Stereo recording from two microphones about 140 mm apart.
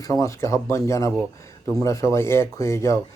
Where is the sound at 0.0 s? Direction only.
20° left (ahead or behind).